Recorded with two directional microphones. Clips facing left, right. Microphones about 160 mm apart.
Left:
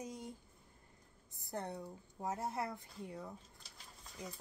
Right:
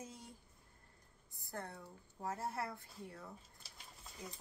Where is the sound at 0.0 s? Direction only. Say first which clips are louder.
Left 6 dB; 15° left (ahead or behind).